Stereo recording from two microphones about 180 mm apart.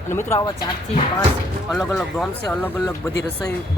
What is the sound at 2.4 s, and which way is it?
Speech, 15° left (ahead or behind).